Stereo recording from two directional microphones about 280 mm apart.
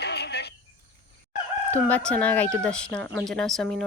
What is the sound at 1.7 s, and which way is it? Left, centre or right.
Speech, centre.